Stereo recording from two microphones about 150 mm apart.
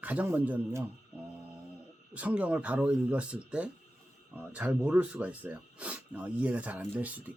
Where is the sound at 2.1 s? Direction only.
10° right (ahead or behind).